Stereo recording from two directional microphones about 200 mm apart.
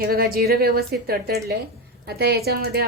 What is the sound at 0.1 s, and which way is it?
A woman's voice, 50° right (ahead or behind).